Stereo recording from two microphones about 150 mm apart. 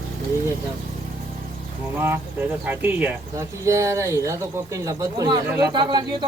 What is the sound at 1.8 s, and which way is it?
Speech, 15° right (ahead or behind).